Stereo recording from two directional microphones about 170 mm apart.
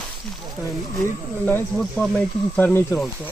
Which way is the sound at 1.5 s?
5° left (ahead or behind).